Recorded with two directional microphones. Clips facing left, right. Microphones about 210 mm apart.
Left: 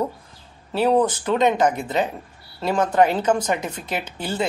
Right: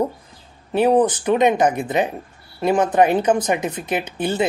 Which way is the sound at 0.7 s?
15° right (ahead or behind).